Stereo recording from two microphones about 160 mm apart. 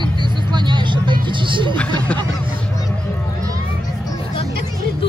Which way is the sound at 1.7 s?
10° left (ahead or behind).